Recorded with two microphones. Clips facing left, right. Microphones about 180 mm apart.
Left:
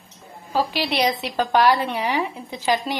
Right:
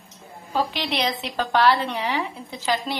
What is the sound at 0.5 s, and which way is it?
A woman's voice, 5° left (ahead or behind).